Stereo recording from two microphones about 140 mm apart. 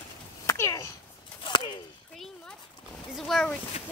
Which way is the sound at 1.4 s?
35° left (ahead or behind).